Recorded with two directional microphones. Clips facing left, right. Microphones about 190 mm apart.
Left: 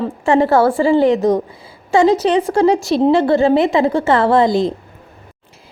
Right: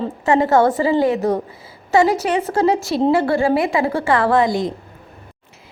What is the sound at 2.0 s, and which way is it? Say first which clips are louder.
A woman's voice: left 3 dB; 20° left (ahead or behind).